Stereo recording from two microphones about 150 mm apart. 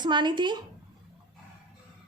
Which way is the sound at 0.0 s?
30° right (ahead or behind).